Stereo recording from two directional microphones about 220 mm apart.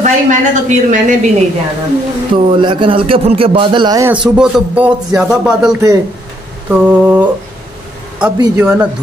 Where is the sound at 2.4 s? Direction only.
25° right (ahead or behind); by 5.7 s 5° right (ahead or behind).